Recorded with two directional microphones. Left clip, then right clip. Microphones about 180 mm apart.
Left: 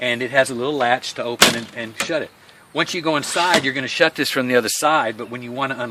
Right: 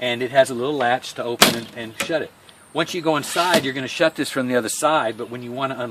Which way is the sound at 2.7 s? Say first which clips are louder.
Left 1 dB; 15° left (ahead or behind).